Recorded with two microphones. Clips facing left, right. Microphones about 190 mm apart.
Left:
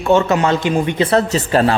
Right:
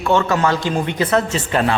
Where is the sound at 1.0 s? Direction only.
35° left (ahead or behind).